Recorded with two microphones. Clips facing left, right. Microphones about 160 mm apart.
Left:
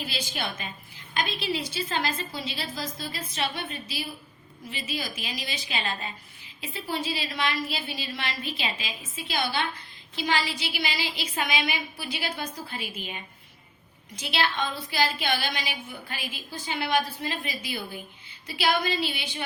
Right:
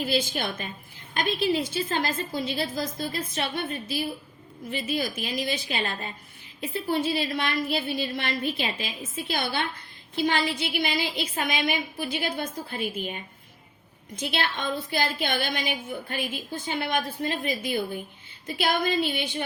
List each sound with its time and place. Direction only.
0.0 s a woman's voice: 50° right (ahead or behind)
14.2 s a woman's voice: 50° right (ahead or behind)